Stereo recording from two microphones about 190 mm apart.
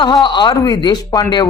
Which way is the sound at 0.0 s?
25° left (ahead or behind).